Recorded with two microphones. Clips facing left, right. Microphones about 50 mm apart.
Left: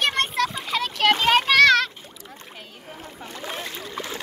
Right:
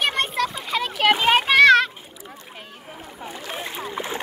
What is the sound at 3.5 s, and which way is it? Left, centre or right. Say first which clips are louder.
Splash: right 3 dB; centre.